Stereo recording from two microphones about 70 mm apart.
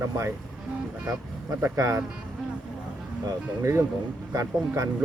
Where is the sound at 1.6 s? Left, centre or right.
Right.